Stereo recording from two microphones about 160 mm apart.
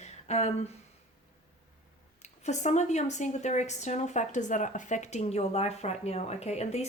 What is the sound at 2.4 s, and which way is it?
A woman's voice, 45° left (ahead or behind).